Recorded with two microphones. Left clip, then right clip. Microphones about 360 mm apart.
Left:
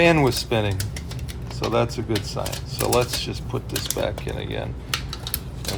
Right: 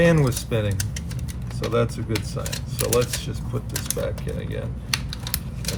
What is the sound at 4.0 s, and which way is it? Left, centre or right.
Speech, left.